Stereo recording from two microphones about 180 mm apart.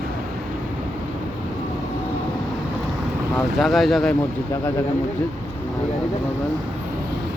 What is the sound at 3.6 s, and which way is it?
Speech, centre (ahead or behind).